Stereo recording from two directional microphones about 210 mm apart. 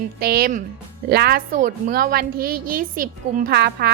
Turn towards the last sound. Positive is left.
turn(degrees=-50)  # may be behind; listen again after turning